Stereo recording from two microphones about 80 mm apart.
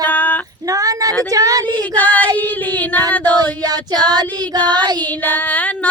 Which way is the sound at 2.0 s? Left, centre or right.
Centre.